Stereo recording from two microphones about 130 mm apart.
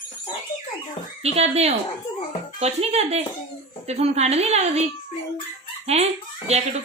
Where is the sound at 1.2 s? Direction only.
55° right (ahead or behind).